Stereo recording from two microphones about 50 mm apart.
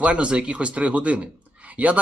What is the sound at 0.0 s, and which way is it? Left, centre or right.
Speech, right.